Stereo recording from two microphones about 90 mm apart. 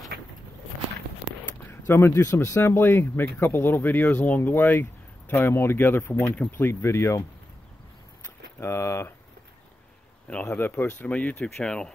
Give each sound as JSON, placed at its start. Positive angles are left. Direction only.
{"t": 1.7, "sound": "speech", "side_deg": 25}
{"t": 8.2, "sound": "a sound", "side_deg": 30}
{"t": 10.4, "sound": "speech", "side_deg": 20}